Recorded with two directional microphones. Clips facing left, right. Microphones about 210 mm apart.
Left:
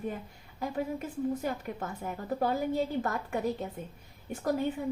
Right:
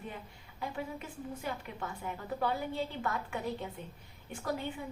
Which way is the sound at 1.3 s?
40° left (ahead or behind).